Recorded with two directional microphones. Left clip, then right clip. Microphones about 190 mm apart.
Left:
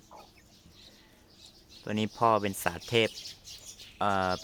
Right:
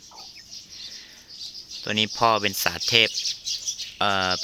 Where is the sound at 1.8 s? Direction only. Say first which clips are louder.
Right 6 dB; 10° right (ahead or behind).